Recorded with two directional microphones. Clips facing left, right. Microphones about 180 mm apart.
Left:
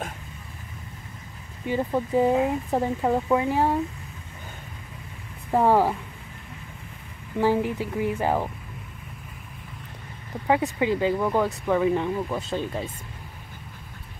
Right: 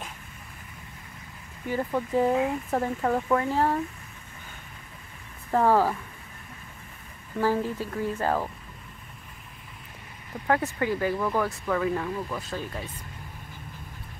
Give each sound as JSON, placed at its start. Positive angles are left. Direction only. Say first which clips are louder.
{"t": 1.7, "sound": "speech", "louder": "left 3 dB", "side_deg": 15}
{"t": 5.5, "sound": "speech", "louder": "left 2 dB", "side_deg": 15}
{"t": 7.3, "sound": "speech", "louder": "left 3 dB", "side_deg": 15}
{"t": 10.4, "sound": "speech", "louder": "left 3 dB", "side_deg": 15}